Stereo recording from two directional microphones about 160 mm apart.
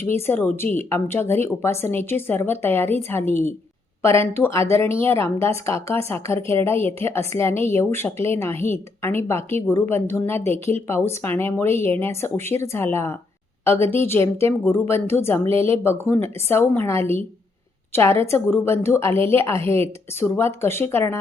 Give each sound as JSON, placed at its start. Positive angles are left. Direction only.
{"t": 0.0, "sound": "speech", "side_deg": 15}
{"t": 13.8, "sound": "a woman's voice", "side_deg": -35}
{"t": 14.4, "sound": "speech", "side_deg": 15}